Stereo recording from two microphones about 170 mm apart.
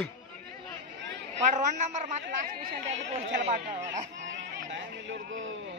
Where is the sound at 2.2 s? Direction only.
60° right (ahead or behind).